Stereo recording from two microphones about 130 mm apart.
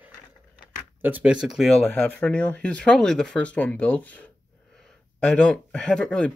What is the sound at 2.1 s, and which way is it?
Speech, 10° left (ahead or behind).